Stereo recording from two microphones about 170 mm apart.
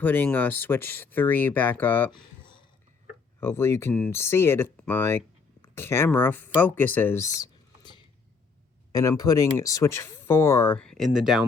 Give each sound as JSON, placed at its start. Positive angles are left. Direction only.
{"t": 0.0, "sound": "speech", "side_deg": 10}
{"t": 3.4, "sound": "speech", "side_deg": 15}